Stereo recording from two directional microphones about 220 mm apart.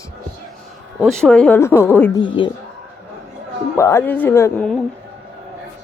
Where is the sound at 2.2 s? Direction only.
20° left (ahead or behind).